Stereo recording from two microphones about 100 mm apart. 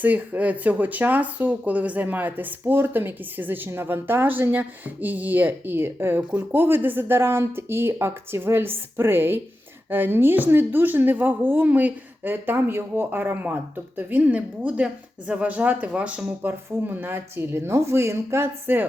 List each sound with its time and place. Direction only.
0.0 s speech: 15° right (ahead or behind)